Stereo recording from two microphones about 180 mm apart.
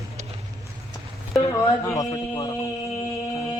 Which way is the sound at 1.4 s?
20° left (ahead or behind).